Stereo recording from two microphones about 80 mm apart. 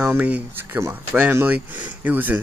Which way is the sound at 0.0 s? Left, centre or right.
Right.